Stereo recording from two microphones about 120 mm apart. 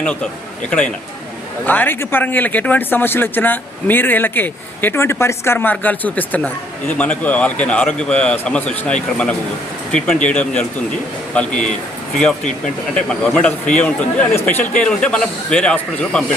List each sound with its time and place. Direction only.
0.0 s speech: 10° left (ahead or behind)
1.6 s speech: 15° left (ahead or behind)
12.9 s speech: 10° left (ahead or behind)